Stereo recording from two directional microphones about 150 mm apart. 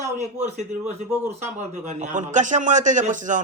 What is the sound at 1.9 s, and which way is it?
A man's voice, 55° right (ahead or behind).